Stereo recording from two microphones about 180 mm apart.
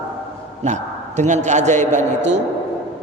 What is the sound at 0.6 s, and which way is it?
A man's voice, 40° right (ahead or behind).